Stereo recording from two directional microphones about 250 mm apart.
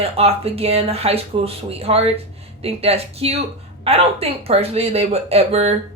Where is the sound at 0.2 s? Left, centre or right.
Right.